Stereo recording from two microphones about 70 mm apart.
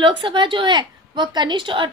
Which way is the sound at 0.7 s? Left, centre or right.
Right.